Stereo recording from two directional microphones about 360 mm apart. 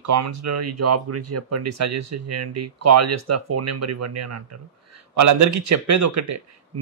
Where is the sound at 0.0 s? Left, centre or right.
Right.